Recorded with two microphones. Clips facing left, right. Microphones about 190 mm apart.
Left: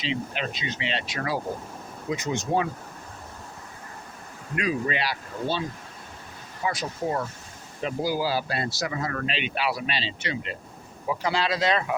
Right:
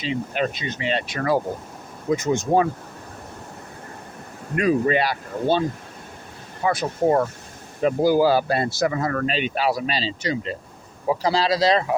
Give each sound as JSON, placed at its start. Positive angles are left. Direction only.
{"t": 0.0, "sound": "speech", "side_deg": -50}
{"t": 4.5, "sound": "speech", "side_deg": -45}
{"t": 6.7, "sound": "speech", "side_deg": -55}